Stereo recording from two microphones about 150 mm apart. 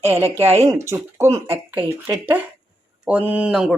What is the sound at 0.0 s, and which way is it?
Speech, 15° right (ahead or behind).